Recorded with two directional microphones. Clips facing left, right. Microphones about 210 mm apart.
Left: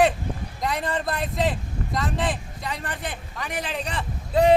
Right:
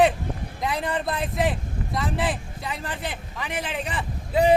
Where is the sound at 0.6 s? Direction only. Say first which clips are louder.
Even; 5° right (ahead or behind).